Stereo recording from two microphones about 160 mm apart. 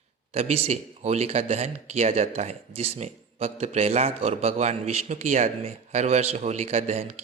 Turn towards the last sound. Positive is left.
turn(degrees=-45)  # may be behind; listen again after turning